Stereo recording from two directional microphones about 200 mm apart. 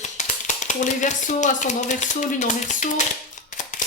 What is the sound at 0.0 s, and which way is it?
Speech, 35° left (ahead or behind).